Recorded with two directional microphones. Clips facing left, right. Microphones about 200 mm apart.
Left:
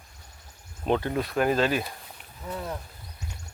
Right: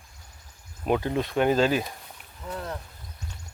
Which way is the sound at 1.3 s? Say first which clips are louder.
Right 2 dB; 25° right (ahead or behind).